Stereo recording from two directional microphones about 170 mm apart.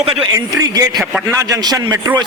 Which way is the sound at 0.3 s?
20° right (ahead or behind).